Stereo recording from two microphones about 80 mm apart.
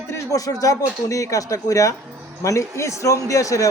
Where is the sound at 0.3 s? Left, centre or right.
Left.